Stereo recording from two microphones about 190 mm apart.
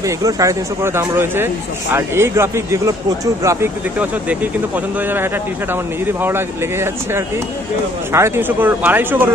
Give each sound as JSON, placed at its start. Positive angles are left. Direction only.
{"t": 0.0, "sound": "speech", "side_deg": -15}